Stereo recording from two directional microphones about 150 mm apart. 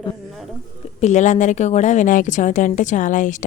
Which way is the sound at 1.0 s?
55° left (ahead or behind).